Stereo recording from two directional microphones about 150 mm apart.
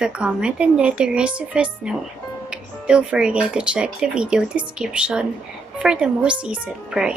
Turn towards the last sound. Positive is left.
turn(degrees=-5)  # may be behind; listen again after turning